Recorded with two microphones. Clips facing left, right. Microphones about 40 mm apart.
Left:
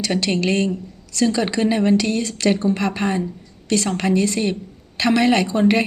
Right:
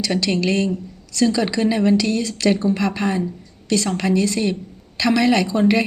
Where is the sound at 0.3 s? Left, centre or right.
Left.